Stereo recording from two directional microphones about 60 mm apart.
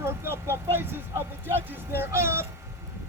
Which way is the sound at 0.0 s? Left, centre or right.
Right.